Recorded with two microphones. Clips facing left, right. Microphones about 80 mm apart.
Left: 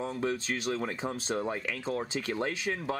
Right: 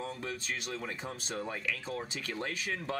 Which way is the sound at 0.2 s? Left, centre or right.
Left.